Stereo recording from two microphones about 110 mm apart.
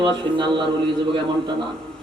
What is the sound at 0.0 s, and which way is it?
Speech, 45° right (ahead or behind).